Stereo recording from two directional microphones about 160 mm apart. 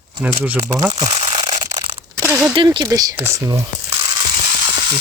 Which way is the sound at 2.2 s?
10° right (ahead or behind).